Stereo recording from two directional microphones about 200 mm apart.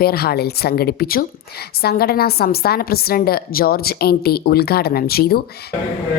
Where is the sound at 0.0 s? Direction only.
50° left (ahead or behind).